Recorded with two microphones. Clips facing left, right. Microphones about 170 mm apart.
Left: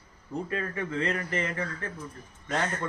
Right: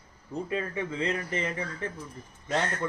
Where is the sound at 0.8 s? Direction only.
15° right (ahead or behind).